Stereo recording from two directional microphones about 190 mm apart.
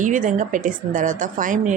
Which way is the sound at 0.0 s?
45° right (ahead or behind).